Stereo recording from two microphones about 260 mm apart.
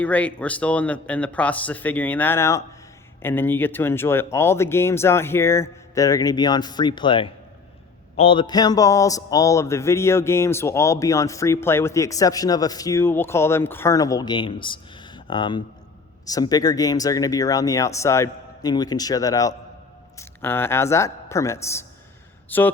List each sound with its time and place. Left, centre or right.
0.0 s a man's voice: centre